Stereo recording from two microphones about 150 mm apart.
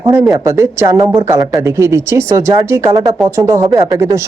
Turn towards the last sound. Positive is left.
turn(degrees=-20)  # may be behind; listen again after turning